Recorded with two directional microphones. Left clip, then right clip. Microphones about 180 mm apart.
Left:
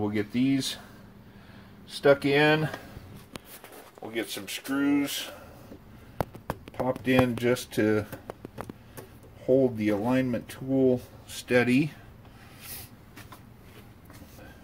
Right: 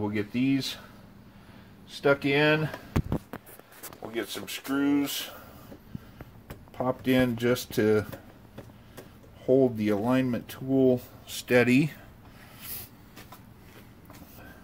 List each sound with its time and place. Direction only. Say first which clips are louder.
0.0 s speech: left 1 dB; 15° right (ahead or behind)
2.0 s speech: left 2 dB; 5° right (ahead or behind)
4.1 s speech: left 1 dB; 30° right (ahead or behind)
6.9 s speech: left 1 dB; 35° right (ahead or behind)
9.5 s speech: even; 40° right (ahead or behind)